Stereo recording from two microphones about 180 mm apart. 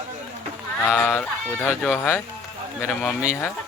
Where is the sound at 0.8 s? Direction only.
5° left (ahead or behind).